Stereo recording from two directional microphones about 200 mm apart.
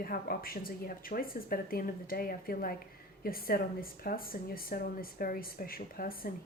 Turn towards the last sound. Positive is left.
turn(degrees=45)  # may be behind; listen again after turning